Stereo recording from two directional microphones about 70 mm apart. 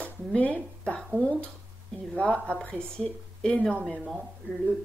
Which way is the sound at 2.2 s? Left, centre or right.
Centre.